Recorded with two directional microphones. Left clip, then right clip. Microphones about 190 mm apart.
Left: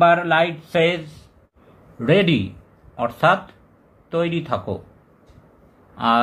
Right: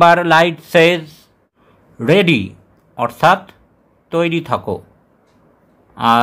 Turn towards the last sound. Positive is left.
turn(degrees=-30)  # may be behind; listen again after turning